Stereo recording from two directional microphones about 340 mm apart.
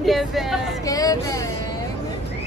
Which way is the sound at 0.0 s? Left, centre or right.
Centre.